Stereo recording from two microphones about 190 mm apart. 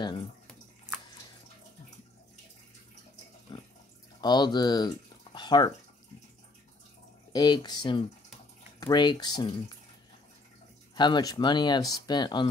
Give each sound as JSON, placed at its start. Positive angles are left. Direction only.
{"t": 0.0, "sound": "bathtub", "side_deg": 25}
{"t": 3.5, "sound": "water", "side_deg": 25}
{"t": 4.2, "sound": "speech", "side_deg": 20}
{"t": 7.3, "sound": "speech", "side_deg": 20}
{"t": 11.0, "sound": "speech", "side_deg": 20}